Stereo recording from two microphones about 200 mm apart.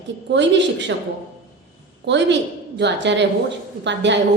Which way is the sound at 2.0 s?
60° right (ahead or behind).